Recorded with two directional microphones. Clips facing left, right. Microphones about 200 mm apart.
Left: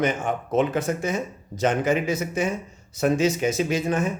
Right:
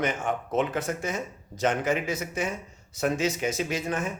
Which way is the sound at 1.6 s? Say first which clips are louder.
Left 4 dB; 30° left (ahead or behind).